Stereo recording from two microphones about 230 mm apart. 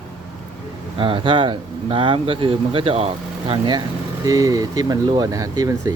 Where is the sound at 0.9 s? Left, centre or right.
Right.